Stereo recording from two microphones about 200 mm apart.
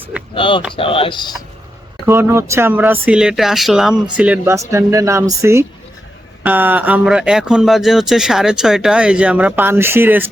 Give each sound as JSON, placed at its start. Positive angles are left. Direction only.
{"t": 0.3, "sound": "speech", "side_deg": 25}
{"t": 2.0, "sound": "speech", "side_deg": -15}